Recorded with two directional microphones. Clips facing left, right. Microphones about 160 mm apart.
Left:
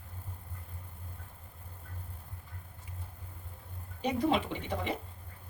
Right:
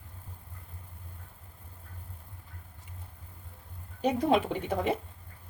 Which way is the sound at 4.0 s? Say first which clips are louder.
Right 4 dB; 45° right (ahead or behind).